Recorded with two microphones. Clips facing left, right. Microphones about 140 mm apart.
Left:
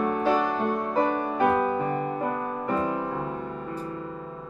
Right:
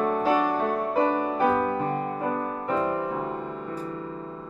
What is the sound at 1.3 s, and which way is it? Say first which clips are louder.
Music: even; centre (ahead or behind).